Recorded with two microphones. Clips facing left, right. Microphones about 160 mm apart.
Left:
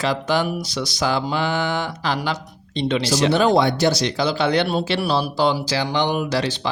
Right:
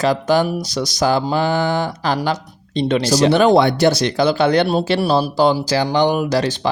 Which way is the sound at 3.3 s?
60° right (ahead or behind).